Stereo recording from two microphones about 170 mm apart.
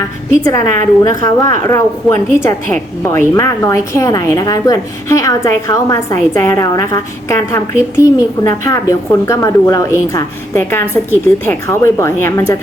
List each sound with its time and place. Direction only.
0.4 s a woman's voice: 20° left (ahead or behind)